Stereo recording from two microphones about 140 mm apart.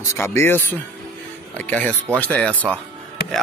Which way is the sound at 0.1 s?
15° left (ahead or behind).